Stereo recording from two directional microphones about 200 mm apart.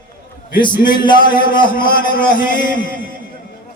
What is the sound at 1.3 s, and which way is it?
Speech, 45° left (ahead or behind).